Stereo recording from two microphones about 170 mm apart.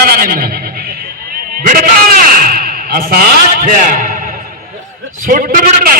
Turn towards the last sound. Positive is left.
turn(degrees=-55)  # may be behind; listen again after turning